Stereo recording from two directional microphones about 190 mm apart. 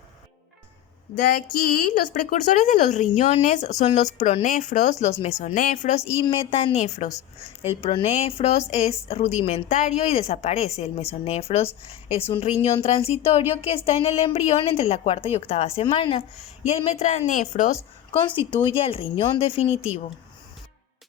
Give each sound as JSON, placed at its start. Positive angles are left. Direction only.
{"t": 1.1, "sound": "a woman's voice", "side_deg": 45}
{"t": 6.1, "sound": "a woman's voice", "side_deg": 30}
{"t": 18.3, "sound": "a woman's voice", "side_deg": 30}